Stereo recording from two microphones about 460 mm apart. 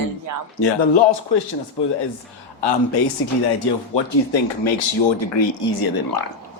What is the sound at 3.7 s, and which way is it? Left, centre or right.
Speech, left.